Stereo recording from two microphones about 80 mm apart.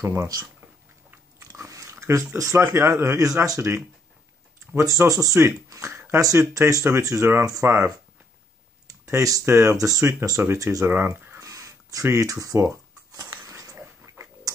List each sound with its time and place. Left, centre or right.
0.0 s speech: right
1.5 s a sound: right
2.6 s speech: right
5.9 s a sound: right
6.3 s speech: right
9.0 s speech: right
10.9 s speech: right
11.4 s a sound: right
13.7 s pig: right